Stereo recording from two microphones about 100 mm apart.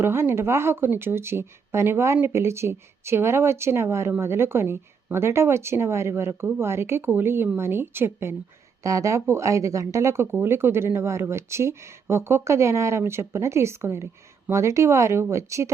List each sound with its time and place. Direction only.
0.0 s speech: 25° right (ahead or behind)
8.8 s speech: 35° right (ahead or behind)